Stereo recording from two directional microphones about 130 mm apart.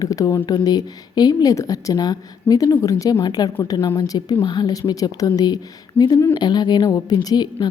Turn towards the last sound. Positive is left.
turn(degrees=30)  # may be behind; listen again after turning